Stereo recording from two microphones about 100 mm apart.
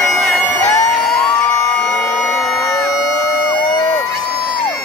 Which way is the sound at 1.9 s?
5° left (ahead or behind).